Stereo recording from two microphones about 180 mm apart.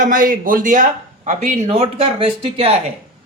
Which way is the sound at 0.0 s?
50° right (ahead or behind).